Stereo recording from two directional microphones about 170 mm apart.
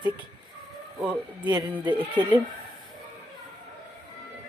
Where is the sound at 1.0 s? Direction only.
10° right (ahead or behind).